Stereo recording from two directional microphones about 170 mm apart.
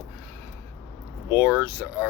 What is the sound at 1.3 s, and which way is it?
Speech, 10° right (ahead or behind).